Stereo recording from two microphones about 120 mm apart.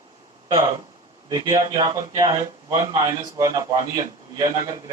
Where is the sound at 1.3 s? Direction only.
30° right (ahead or behind).